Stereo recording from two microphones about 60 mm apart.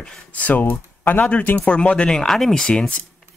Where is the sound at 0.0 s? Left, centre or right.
Centre.